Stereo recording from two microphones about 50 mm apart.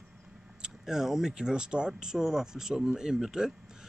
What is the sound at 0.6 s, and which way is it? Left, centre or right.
Speech, centre.